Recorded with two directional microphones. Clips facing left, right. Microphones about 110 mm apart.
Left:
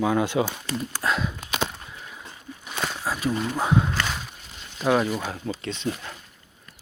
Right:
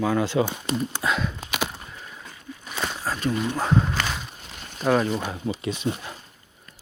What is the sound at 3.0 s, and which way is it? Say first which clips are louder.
Speech: right 1 dB; 5° left (ahead or behind).